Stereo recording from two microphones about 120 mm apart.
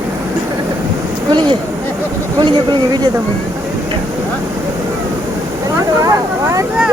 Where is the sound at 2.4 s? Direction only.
40° right (ahead or behind).